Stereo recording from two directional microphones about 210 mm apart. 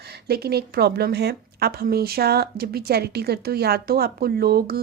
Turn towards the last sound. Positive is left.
turn(degrees=-45)  # may be behind; listen again after turning